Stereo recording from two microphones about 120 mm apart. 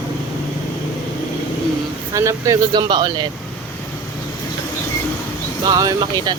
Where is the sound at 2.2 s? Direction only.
25° right (ahead or behind).